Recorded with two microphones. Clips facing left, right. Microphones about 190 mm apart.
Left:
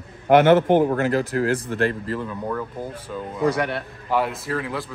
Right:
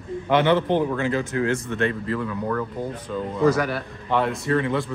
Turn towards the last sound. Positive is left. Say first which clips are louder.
# right 5 dB
turn(degrees=0)  # may be behind; listen again after turning